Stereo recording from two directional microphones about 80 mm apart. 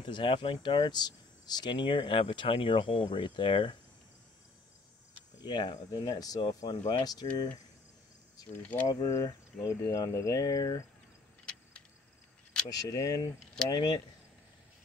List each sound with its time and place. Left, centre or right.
0.0 s speech: left
5.4 s speech: left
6.6 s speech: left
8.8 s speech: left
12.6 s speech: left